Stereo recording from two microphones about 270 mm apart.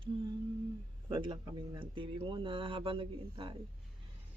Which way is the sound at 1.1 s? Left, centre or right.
Centre.